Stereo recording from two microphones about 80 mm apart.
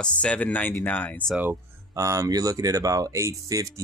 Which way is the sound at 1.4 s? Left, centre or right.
Right.